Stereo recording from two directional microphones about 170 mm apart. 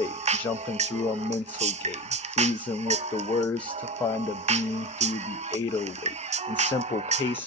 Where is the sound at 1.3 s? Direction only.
40° right (ahead or behind).